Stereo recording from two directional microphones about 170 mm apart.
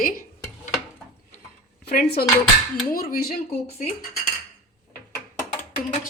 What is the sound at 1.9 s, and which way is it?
Dishes, 70° left (ahead or behind).